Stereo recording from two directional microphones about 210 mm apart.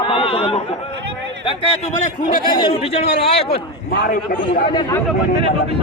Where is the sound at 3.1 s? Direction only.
50° left (ahead or behind).